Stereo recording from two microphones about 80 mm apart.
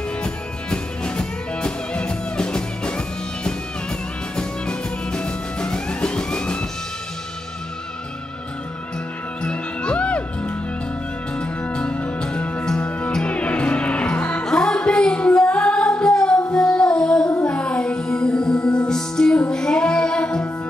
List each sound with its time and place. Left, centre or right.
0.2 s music: centre
4.4 s music: centre
9.4 s music: centre